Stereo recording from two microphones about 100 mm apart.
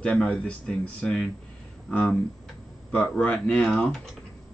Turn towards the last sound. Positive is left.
turn(degrees=5)  # may be behind; listen again after turning